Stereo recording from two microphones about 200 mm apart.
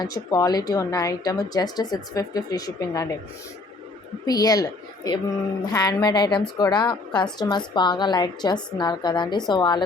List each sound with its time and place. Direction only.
0.0 s a woman's voice: 20° left (ahead or behind)
4.3 s a woman's voice: 20° left (ahead or behind)